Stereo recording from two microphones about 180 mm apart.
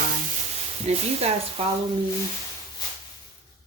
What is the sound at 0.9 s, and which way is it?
Speech, 35° right (ahead or behind).